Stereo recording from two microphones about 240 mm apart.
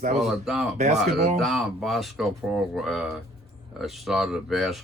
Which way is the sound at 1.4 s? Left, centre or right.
Centre.